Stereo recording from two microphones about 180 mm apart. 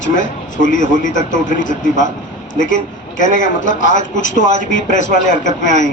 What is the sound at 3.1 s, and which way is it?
A man's voice, 45° left (ahead or behind).